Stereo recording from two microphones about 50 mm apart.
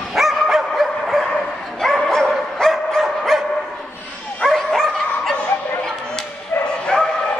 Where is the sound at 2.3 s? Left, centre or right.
Centre.